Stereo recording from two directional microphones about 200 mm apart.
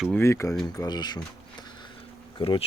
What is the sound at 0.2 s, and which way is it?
Speech, 15° left (ahead or behind).